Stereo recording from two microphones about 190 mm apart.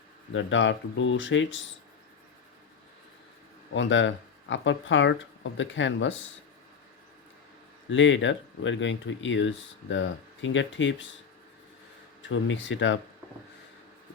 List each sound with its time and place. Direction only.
0.3 s speech: 75° left (ahead or behind)
3.7 s speech: 75° left (ahead or behind)
7.9 s speech: 80° left
12.3 s speech: 80° left